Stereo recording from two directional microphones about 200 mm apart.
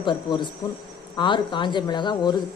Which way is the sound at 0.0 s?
25° left (ahead or behind).